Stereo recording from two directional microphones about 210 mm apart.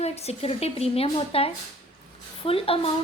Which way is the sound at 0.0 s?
30° left (ahead or behind).